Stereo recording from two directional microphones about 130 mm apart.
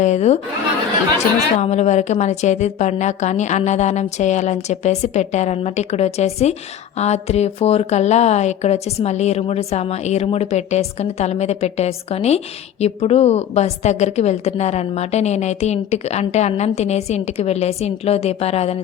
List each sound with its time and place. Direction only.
0.0 s a woman's voice: 60° left (ahead or behind)
1.5 s a woman's voice: 55° left (ahead or behind)